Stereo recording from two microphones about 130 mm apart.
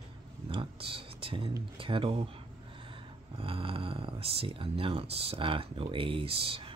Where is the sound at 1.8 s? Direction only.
45° right (ahead or behind).